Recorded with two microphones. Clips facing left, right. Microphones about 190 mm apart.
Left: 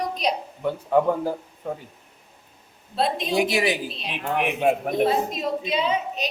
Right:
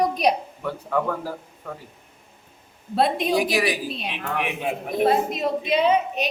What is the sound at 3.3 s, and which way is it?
Speech, 25° left (ahead or behind).